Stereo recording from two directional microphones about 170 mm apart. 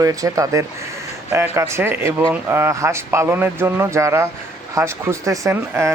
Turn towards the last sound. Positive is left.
turn(degrees=-15)  # may be behind; listen again after turning